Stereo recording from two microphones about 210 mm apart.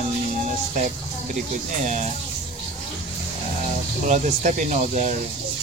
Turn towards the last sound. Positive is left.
turn(degrees=-35)  # may be behind; listen again after turning